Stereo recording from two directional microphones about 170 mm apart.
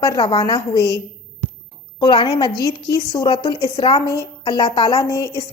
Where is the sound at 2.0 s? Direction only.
30° left (ahead or behind).